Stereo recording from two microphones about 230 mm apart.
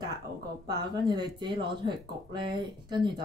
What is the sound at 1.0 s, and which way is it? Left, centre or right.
Speech, centre.